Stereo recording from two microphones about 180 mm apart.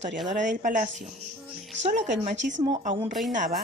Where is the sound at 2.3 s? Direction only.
90° right.